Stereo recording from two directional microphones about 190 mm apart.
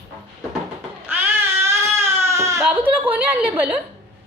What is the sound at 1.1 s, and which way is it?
Baby cry, 10° right (ahead or behind).